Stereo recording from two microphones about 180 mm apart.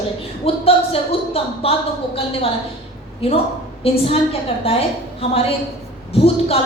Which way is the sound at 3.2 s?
35° left (ahead or behind).